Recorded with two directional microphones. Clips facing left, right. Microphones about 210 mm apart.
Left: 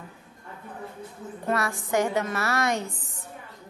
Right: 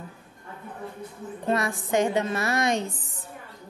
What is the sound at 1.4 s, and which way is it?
Speech, 20° right (ahead or behind).